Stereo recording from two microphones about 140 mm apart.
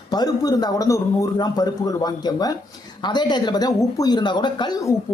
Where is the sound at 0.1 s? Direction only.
25° left (ahead or behind).